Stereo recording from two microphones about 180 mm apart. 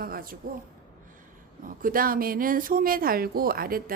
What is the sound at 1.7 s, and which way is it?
Speech, 50° right (ahead or behind).